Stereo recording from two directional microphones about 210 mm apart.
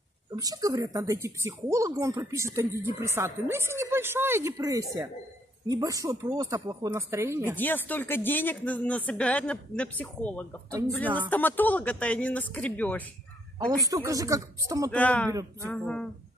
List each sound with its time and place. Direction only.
0.3 s a woman's voice: 15° right (ahead or behind)
7.5 s speech: 10° left (ahead or behind)
13.7 s a woman's voice: 15° right (ahead or behind)
14.9 s speech: 5° left (ahead or behind)